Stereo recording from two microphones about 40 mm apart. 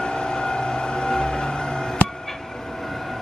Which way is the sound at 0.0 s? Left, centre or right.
Centre.